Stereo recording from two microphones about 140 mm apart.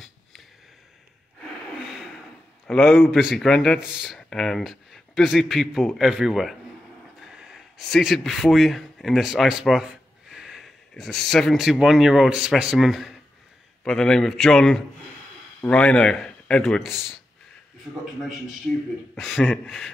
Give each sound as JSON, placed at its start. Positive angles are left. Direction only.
{"t": 2.8, "sound": "speech", "side_deg": 0}
{"t": 19.1, "sound": "speech", "side_deg": 0}